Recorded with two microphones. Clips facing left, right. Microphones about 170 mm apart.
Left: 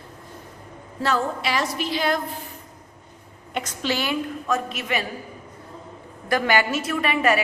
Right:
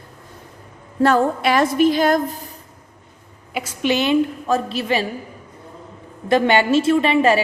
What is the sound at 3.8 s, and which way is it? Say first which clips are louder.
A woman's voice: right 9 dB; 20° right (ahead or behind).